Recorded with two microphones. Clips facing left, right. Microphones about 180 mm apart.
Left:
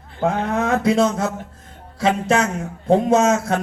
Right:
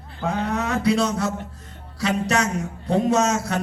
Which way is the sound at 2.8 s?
50° left (ahead or behind).